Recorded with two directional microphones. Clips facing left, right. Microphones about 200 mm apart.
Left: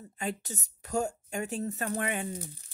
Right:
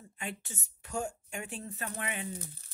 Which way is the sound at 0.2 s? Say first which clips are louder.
Left 6 dB; 40° left (ahead or behind).